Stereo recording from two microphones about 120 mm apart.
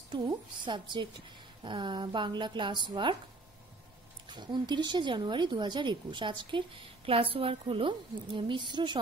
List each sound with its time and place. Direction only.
0.1 s speech: 40° right (ahead or behind)
4.3 s speech: 40° right (ahead or behind)